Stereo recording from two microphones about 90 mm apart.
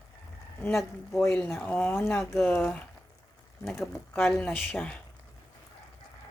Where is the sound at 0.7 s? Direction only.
Centre (ahead or behind).